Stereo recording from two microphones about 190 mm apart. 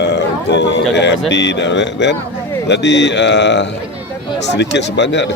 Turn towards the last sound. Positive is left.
turn(degrees=65)  # may be behind; listen again after turning